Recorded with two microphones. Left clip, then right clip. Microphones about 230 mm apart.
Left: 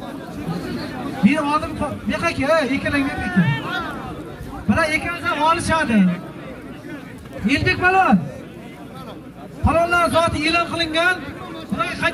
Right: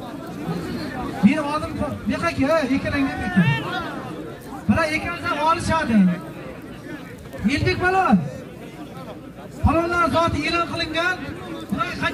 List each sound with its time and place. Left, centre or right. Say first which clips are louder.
1.2 s a sound: left 3 dB; left
2.0 s a man's voice: left 2 dB; left
3.3 s speech: right 2 dB; right
3.6 s a sound: left 2 dB; left
4.6 s a man's voice: left 2 dB; left
7.4 s a man's voice: left 4 dB; left
9.7 s a man's voice: left 3 dB; left